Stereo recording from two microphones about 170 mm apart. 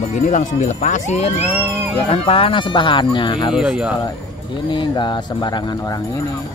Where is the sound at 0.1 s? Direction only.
45° left (ahead or behind).